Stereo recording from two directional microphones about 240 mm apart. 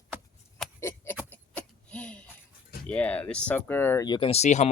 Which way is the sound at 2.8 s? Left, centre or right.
Centre.